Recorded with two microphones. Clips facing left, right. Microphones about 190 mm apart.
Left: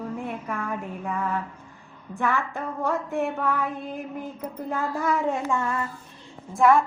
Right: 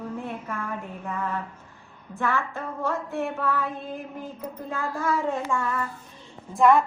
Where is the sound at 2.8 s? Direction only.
15° left (ahead or behind).